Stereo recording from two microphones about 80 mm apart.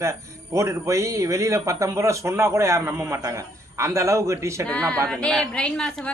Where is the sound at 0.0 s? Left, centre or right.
Right.